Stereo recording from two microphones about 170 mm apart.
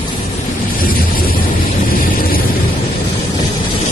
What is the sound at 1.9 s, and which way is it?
Vehicle, 60° left (ahead or behind).